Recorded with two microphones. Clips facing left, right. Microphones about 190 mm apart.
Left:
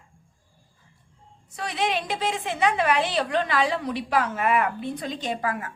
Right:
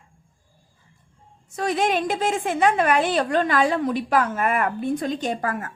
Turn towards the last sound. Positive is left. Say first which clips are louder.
# right 2 dB
turn(degrees=-45)  # may be behind; listen again after turning